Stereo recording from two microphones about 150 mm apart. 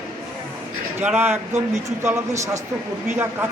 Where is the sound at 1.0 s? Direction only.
15° right (ahead or behind).